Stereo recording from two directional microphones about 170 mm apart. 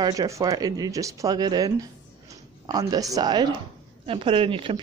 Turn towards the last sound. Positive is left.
turn(degrees=-30)  # may be behind; listen again after turning